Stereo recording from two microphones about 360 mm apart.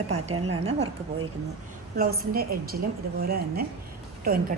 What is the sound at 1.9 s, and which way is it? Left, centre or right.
A woman's voice, right.